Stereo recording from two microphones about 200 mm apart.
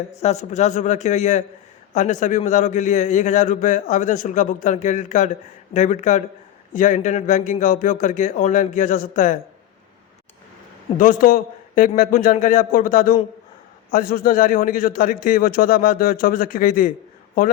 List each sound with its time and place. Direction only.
0.1 s a man's voice: 35° left (ahead or behind)
10.9 s a man's voice: 40° left (ahead or behind)